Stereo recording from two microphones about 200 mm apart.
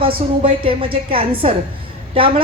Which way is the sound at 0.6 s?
25° right (ahead or behind).